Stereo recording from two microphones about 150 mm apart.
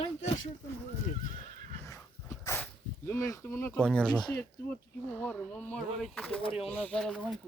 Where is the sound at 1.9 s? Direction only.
20° left (ahead or behind).